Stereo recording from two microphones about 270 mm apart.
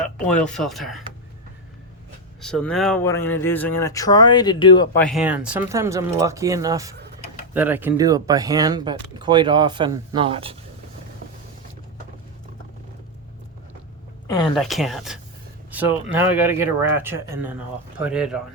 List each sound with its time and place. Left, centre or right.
0.3 s speech: centre
2.4 s speech: centre
5.0 s speech: centre; by 10.6 s right
14.5 s speech: centre